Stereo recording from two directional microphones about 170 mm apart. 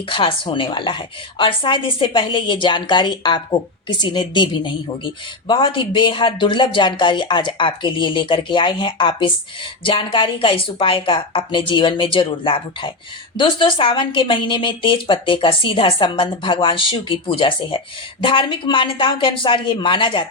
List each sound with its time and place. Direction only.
0.1 s a woman's voice: 30° left (ahead or behind)